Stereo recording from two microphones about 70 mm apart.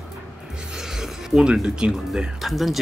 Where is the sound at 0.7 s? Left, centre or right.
Centre.